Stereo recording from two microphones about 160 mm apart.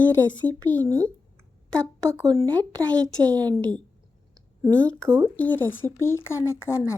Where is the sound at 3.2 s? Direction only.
25° right (ahead or behind).